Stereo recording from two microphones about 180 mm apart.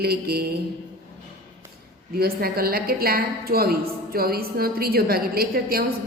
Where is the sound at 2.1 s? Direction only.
55° right (ahead or behind).